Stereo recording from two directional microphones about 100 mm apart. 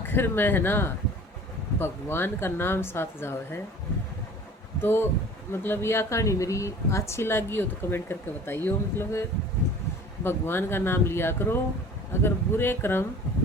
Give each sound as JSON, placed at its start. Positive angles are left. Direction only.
{"t": 0.0, "sound": "speech", "side_deg": 20}
{"t": 4.8, "sound": "speech", "side_deg": 20}
{"t": 10.2, "sound": "speech", "side_deg": 20}